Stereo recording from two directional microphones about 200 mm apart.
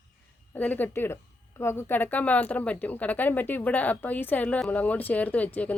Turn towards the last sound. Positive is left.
turn(degrees=5)  # may be behind; listen again after turning